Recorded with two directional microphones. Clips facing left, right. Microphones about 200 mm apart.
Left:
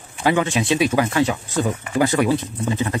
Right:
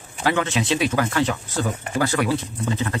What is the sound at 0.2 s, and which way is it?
Speech, 15° left (ahead or behind).